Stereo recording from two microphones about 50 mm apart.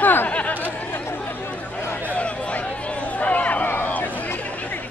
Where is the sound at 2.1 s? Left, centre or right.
Left.